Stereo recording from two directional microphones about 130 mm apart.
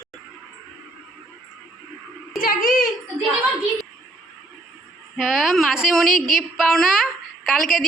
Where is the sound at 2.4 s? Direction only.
90° left.